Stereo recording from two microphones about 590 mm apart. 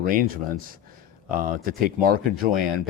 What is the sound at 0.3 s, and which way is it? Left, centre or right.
Speech, centre.